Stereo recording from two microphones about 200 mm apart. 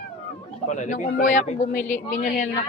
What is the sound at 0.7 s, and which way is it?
A woman's voice, 40° left (ahead or behind).